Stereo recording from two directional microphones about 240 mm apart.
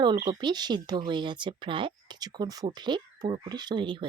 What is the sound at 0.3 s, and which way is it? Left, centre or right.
Speech, centre.